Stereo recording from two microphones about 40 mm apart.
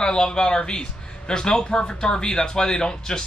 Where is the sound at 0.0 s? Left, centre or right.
Centre.